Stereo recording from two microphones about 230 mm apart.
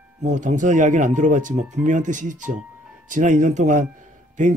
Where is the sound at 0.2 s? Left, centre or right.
Right.